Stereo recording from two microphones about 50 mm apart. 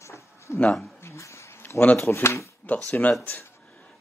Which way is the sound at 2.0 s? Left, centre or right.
Left.